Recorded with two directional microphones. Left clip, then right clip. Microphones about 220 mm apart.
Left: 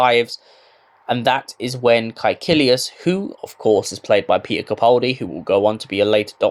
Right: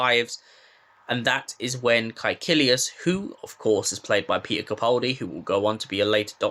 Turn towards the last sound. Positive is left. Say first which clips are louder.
# left 7 dB
turn(degrees=15)  # may be behind; listen again after turning